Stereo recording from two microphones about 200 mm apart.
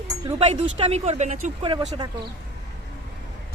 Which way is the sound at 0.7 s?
30° right (ahead or behind).